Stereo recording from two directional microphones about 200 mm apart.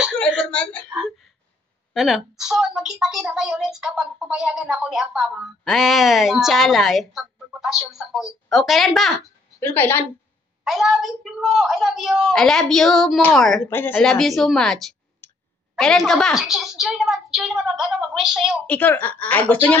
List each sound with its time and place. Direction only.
0.0 s whimper: centre (ahead or behind)
2.0 s a woman's voice: centre (ahead or behind)
10.6 s a woman's voice: centre (ahead or behind)